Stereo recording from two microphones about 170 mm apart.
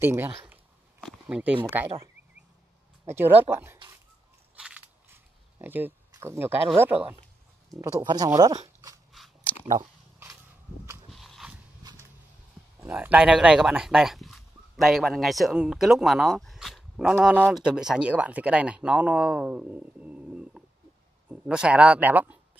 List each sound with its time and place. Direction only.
0.0 s speech: 15° right (ahead or behind)
3.1 s speech: 10° right (ahead or behind)
4.6 s camera: 5° right (ahead or behind)
7.8 s speech: 25° right (ahead or behind)
9.1 s chewing: centre (ahead or behind)
11.1 s biting: centre (ahead or behind)
12.8 s speech: 10° right (ahead or behind)